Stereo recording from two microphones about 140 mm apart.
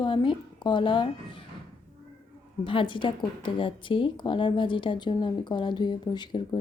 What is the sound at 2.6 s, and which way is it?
Speech, 35° left (ahead or behind).